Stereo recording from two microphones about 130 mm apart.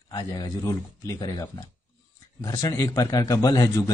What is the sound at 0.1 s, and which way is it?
Speech, 30° left (ahead or behind).